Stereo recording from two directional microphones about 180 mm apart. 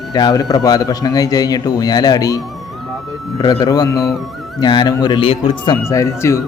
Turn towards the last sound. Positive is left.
turn(degrees=15)  # may be behind; listen again after turning